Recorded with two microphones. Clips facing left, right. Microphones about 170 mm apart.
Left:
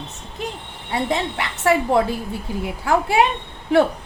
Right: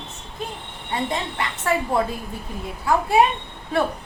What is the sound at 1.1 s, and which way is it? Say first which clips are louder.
A woman's voice: left 3 dB; 80° left.